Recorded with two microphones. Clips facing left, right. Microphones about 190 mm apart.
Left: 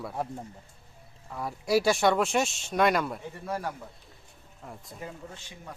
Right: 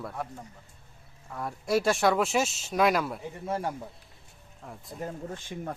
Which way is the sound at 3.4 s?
25° right (ahead or behind).